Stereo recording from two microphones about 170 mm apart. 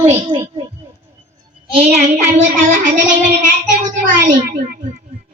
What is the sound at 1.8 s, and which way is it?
Child singing, 45° right (ahead or behind).